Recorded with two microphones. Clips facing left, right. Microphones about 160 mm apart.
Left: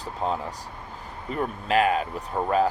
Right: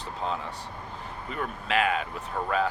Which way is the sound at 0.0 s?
40° left (ahead or behind).